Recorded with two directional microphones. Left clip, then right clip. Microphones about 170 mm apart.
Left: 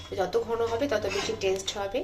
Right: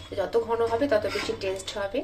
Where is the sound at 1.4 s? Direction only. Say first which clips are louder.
Left 1 dB; centre (ahead or behind).